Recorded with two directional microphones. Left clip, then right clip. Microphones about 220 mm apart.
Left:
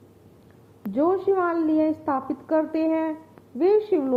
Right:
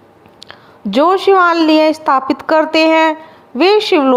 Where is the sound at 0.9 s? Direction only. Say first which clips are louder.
Right 12 dB; 25° right (ahead or behind).